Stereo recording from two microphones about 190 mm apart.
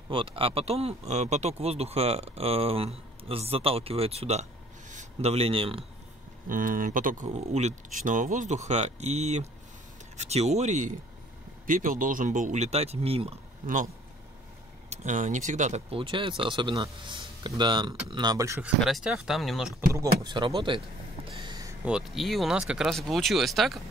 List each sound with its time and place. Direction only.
0.1 s speech: 30° right (ahead or behind)
6.5 s speech: 45° right (ahead or behind)
14.9 s speech: 40° right (ahead or behind); by 18.6 s 20° right (ahead or behind)
18.8 s speech: centre (ahead or behind)
19.9 s speech: 20° right (ahead or behind)
21.3 s vehicle: 25° right (ahead or behind)
21.8 s speech: 5° right (ahead or behind)